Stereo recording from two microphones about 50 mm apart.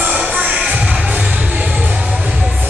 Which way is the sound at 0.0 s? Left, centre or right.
Right.